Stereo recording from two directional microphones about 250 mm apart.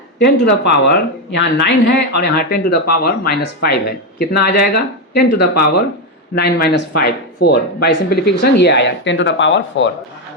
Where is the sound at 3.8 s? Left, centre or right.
Left.